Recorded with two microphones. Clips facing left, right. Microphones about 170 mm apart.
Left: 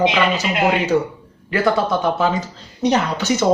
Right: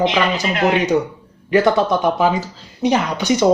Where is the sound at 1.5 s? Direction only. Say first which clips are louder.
Right 3 dB; 15° right (ahead or behind).